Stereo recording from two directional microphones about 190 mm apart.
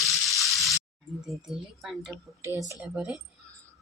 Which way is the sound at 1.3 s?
Centre (ahead or behind).